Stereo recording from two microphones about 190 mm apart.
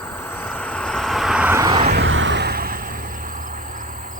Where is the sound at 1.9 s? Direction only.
75° right (ahead or behind).